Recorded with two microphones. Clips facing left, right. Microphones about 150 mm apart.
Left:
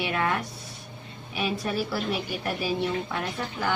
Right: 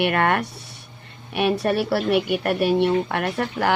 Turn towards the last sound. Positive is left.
turn(degrees=-70)  # may be behind; listen again after turning